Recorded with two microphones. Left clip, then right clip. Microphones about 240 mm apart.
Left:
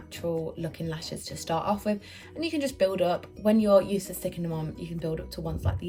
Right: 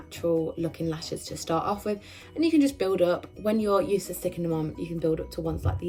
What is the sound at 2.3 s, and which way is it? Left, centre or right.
Speech, centre.